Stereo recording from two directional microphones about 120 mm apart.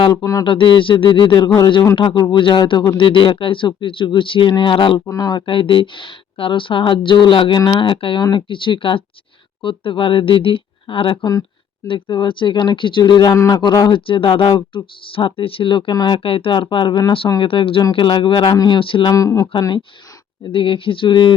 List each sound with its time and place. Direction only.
0.0 s speech: 35° left (ahead or behind)
0.4 s speech: 45° left (ahead or behind)
5.0 s speech: 30° left (ahead or behind)
17.4 s speech: 45° left (ahead or behind)
18.8 s speech: 45° left (ahead or behind)
19.1 s speech: 30° left (ahead or behind)
20.5 s speech: 45° left (ahead or behind)